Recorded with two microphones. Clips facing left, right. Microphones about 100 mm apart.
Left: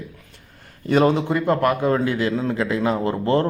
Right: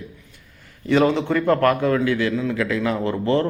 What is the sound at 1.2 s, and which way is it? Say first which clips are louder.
A man's voice: right 1 dB; 20° left (ahead or behind).